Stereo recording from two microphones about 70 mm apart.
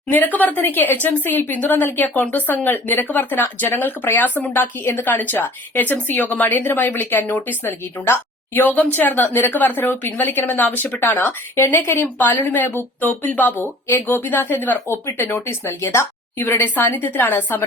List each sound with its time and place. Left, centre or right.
0.1 s speech: left
16.4 s speech: left